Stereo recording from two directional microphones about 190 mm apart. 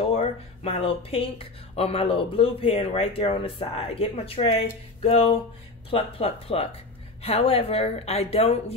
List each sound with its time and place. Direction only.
0.1 s speech: 30° left (ahead or behind)